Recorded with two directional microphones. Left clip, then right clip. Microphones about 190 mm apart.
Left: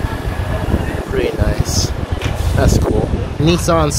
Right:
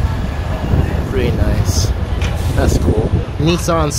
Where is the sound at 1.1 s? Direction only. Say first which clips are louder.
Left 2 dB; 15° left (ahead or behind).